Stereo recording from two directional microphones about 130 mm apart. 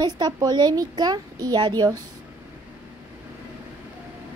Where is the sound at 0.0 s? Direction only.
30° right (ahead or behind).